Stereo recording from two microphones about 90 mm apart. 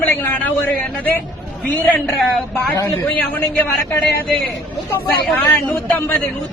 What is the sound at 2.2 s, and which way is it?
Speech, centre (ahead or behind).